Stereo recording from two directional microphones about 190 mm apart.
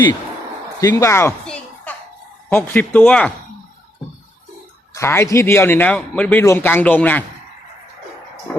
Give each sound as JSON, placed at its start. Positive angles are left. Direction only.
{"t": 0.8, "sound": "speech", "side_deg": 15}
{"t": 1.5, "sound": "a sound", "side_deg": 5}
{"t": 2.5, "sound": "speech", "side_deg": 10}
{"t": 4.9, "sound": "speech", "side_deg": 15}